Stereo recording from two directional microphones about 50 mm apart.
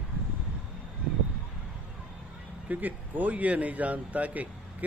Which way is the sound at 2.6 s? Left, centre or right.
Right.